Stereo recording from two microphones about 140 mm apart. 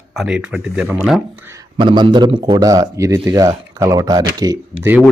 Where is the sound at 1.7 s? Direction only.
35° right (ahead or behind).